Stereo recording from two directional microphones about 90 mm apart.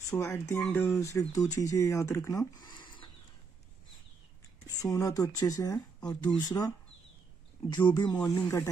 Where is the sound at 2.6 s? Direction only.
60° left (ahead or behind).